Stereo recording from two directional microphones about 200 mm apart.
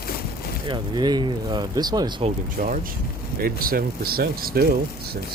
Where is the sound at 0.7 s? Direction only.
20° right (ahead or behind).